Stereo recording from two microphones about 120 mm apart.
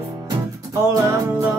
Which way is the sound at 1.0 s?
25° right (ahead or behind).